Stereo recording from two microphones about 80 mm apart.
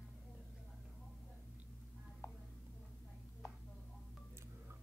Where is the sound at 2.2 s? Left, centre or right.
Left.